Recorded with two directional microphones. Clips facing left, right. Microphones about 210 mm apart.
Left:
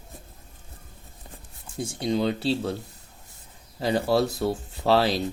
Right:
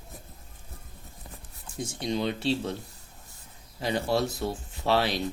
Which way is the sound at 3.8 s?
35° left (ahead or behind).